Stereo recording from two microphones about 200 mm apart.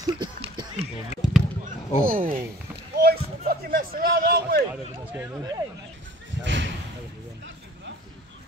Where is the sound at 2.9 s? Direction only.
50° right (ahead or behind).